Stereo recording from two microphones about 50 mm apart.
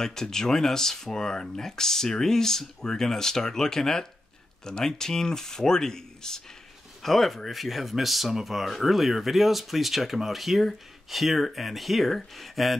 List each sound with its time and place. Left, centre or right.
0.0 s speech: centre